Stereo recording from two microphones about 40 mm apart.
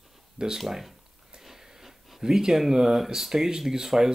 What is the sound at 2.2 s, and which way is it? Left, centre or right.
Speech, centre.